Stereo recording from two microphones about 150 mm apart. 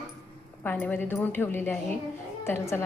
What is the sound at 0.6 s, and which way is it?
A woman's voice, 10° left (ahead or behind).